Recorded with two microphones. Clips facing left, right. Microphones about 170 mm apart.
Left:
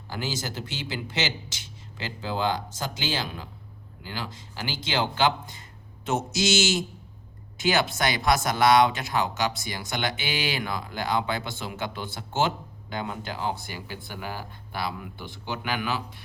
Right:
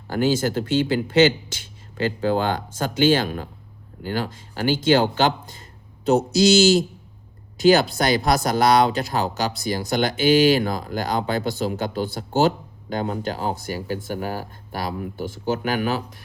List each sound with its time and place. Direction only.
0.1 s speech: 55° right (ahead or behind)